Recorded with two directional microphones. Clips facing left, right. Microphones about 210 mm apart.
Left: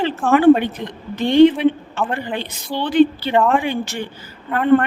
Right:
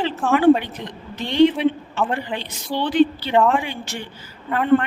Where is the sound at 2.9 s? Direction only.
55° left (ahead or behind).